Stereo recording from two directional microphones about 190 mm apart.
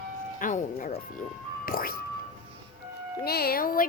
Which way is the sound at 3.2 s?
55° left (ahead or behind).